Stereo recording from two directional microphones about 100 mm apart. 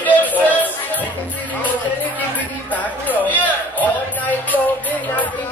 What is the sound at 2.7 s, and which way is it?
Speech, 15° left (ahead or behind).